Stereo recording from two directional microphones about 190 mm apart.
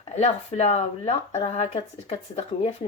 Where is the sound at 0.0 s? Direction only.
35° left (ahead or behind).